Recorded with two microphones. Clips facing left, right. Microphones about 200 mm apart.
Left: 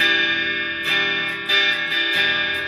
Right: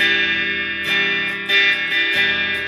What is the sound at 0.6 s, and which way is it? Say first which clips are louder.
Music: right 1 dB; 15° right (ahead or behind).